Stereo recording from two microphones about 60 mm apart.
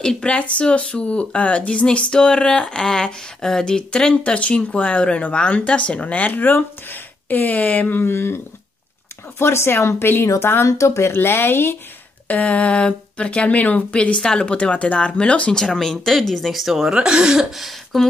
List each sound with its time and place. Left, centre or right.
0.0 s speech: centre; by 8.4 s left
9.4 s speech: left
10.7 s speech: left
11.1 s speech: left
12.3 s speech: left
15.5 s speech: centre
17.5 s speech: centre